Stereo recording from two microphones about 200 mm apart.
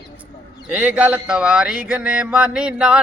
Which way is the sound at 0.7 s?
10° right (ahead or behind).